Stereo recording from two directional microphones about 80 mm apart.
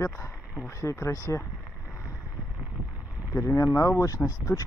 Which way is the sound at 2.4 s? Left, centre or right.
Centre.